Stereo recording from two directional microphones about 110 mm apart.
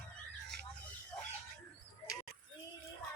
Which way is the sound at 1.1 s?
35° left (ahead or behind).